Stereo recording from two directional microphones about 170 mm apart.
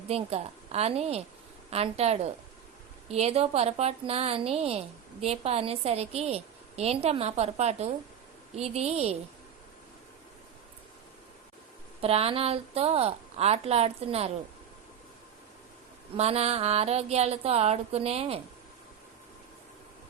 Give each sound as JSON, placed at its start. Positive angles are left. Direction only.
{"t": 0.1, "sound": "a woman's voice", "side_deg": -35}
{"t": 12.0, "sound": "a woman's voice", "side_deg": -35}
{"t": 16.1, "sound": "a woman's voice", "side_deg": -35}